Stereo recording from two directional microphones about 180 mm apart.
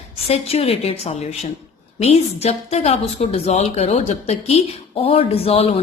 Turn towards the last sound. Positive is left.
turn(degrees=35)  # may be behind; listen again after turning